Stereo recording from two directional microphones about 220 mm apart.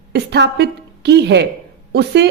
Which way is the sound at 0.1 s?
50° right (ahead or behind).